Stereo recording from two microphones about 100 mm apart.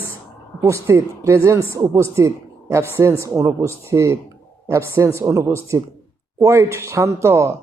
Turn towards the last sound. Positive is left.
turn(degrees=-30)  # may be behind; listen again after turning